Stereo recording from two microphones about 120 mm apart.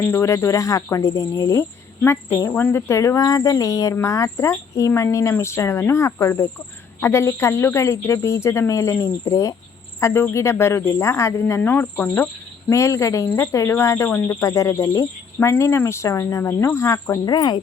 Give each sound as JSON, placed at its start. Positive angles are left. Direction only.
{"t": 0.1, "sound": "speech", "side_deg": 25}